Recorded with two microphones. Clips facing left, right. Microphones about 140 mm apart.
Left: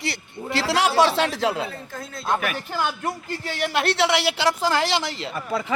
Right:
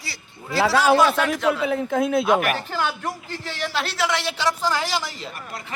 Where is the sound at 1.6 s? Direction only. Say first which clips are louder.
Right 12 dB; 90° right.